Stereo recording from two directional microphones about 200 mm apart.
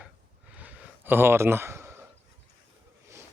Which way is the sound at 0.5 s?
5° right (ahead or behind).